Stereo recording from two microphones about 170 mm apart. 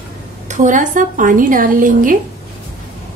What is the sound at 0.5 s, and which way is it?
A woman's voice, 45° right (ahead or behind).